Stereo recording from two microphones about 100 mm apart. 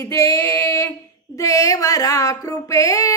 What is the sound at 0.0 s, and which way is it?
Female singing, 30° left (ahead or behind).